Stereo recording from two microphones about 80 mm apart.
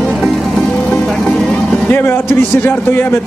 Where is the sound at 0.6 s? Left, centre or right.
Centre.